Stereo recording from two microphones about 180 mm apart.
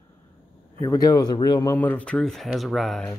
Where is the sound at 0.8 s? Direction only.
15° left (ahead or behind); by 3.1 s centre (ahead or behind).